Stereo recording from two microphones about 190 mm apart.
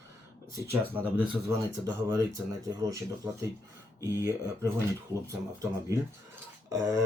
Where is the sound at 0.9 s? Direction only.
10° right (ahead or behind).